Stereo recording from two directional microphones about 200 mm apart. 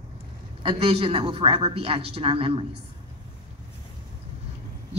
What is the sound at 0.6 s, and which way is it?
Speech, 25° right (ahead or behind).